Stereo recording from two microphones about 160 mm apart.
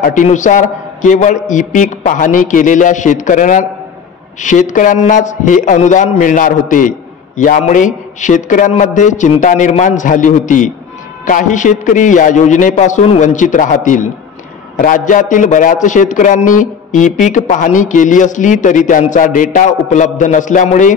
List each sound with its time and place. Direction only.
0.0 s a man's voice: 50° left (ahead or behind)